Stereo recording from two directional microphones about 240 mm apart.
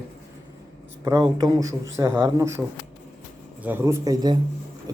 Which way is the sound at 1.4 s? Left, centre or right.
Centre.